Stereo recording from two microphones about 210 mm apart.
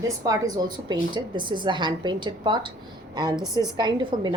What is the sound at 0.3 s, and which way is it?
A woman's voice, 20° right (ahead or behind).